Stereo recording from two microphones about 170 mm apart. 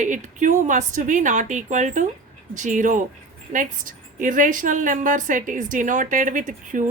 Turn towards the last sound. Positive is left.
turn(degrees=-50)  # may be behind; listen again after turning